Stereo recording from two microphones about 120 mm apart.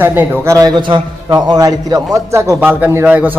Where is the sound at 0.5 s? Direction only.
35° right (ahead or behind); by 3.3 s 15° right (ahead or behind).